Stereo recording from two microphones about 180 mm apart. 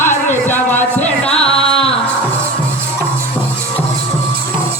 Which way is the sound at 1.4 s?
35° left (ahead or behind).